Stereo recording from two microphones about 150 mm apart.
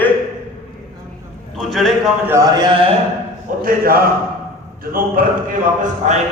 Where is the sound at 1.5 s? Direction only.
Centre (ahead or behind).